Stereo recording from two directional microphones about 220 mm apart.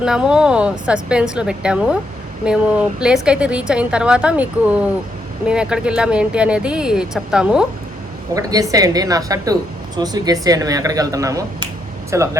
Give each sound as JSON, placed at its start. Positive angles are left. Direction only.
{"t": 0.0, "sound": "a woman's voice", "side_deg": -5}
{"t": 8.4, "sound": "speech", "side_deg": -15}